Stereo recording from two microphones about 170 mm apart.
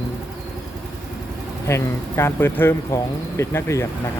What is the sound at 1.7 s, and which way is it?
Speech, 15° left (ahead or behind).